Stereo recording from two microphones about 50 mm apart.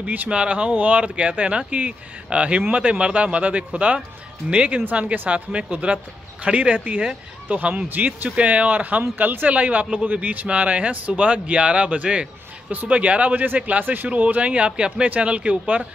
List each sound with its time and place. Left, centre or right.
0.0 s speech: right
0.3 s speech: right
5.5 s speech: right